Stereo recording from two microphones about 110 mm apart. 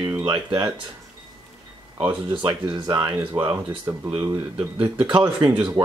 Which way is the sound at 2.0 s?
45° right (ahead or behind).